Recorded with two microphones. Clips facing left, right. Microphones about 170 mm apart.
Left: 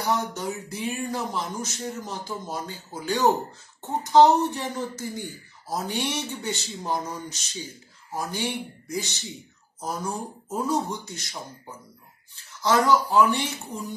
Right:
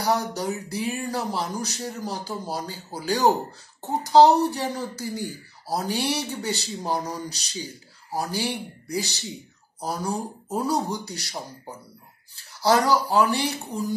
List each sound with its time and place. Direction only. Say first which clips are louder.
0.0 s speech: right 2 dB; 35° right (ahead or behind)